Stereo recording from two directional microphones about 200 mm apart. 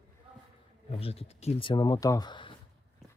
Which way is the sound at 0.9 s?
30° left (ahead or behind).